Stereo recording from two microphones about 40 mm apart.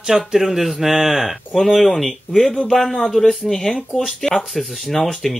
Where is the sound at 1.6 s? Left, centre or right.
Centre.